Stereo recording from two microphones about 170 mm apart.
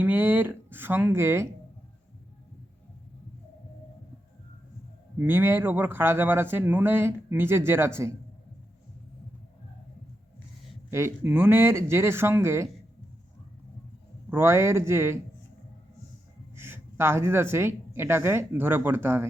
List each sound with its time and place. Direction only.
0.0 s speech: 10° right (ahead or behind)
5.2 s speech: 15° right (ahead or behind)
10.9 s speech: 15° right (ahead or behind)
14.3 s speech: 15° right (ahead or behind)
16.6 s a woman's voice: 15° right (ahead or behind)